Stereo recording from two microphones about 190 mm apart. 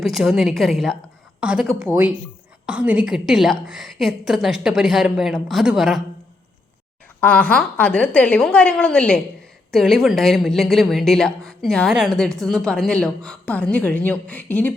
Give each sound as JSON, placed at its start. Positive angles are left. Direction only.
{"t": 0.0, "sound": "a woman's voice", "side_deg": 0}
{"t": 7.2, "sound": "a woman's voice", "side_deg": 5}